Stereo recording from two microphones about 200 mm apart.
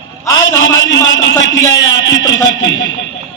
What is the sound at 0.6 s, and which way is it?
A man's voice, 70° left (ahead or behind).